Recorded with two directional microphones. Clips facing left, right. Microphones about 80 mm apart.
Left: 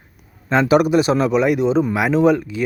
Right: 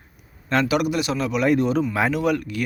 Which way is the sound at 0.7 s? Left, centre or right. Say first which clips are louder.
Left 8 dB; left.